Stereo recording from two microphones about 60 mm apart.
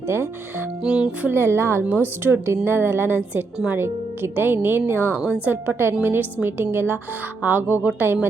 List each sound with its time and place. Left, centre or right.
0.1 s speech: right
0.8 s speech: centre
1.3 s speech: right
1.9 s a woman's voice: right